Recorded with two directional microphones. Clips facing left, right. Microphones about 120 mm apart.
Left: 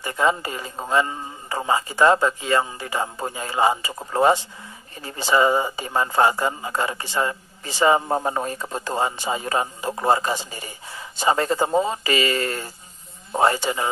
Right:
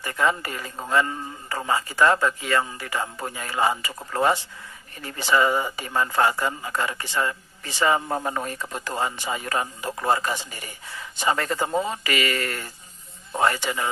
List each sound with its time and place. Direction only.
0.0 s speech: 25° left (ahead or behind)